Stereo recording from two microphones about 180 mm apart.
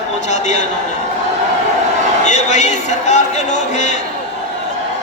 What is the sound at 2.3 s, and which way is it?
A man's voice, 40° left (ahead or behind).